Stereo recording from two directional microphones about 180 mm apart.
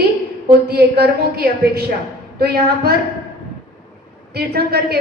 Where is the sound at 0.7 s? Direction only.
65° right (ahead or behind).